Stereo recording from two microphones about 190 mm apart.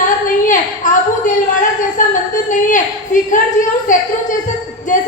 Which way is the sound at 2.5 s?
40° left (ahead or behind).